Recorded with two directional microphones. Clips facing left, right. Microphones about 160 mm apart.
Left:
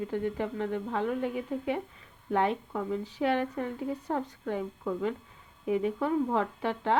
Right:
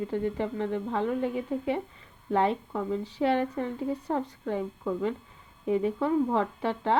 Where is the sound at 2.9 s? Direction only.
30° right (ahead or behind).